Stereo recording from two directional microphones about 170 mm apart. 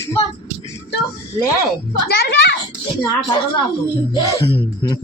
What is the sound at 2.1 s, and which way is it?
Speech, 75° left (ahead or behind).